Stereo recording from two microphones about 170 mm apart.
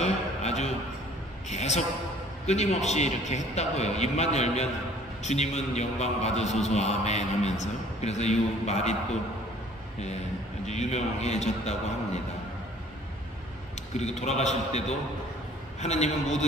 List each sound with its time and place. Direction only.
0.0 s a sound: 40° left (ahead or behind)
1.5 s a man's voice: 40° left (ahead or behind)
10.7 s a man's voice: 40° left (ahead or behind)
14.2 s a man's voice: 40° left (ahead or behind)